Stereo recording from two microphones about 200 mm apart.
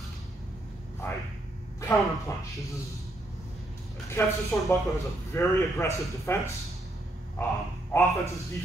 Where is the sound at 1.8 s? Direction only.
15° left (ahead or behind).